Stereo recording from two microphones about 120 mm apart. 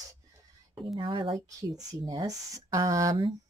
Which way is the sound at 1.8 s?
30° right (ahead or behind).